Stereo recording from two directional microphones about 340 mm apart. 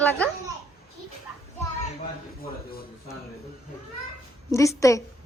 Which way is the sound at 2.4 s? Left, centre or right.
Left.